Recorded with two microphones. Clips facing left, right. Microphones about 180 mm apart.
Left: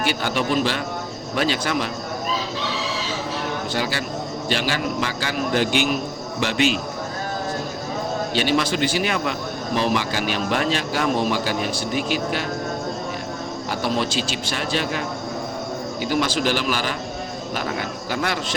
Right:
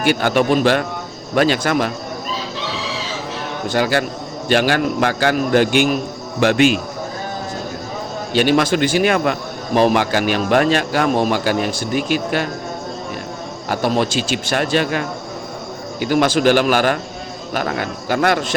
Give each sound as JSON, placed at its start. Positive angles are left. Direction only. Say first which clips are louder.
{"t": 0.0, "sound": "a man's voice", "louder": "right 7 dB", "side_deg": -55}
{"t": 3.7, "sound": "a man's voice", "louder": "right 7 dB", "side_deg": -55}
{"t": 8.3, "sound": "a man's voice", "louder": "right 8 dB", "side_deg": -50}
{"t": 13.7, "sound": "a man's voice", "louder": "right 6 dB", "side_deg": -50}